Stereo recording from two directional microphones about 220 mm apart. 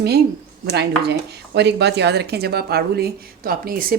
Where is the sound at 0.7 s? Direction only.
50° right (ahead or behind).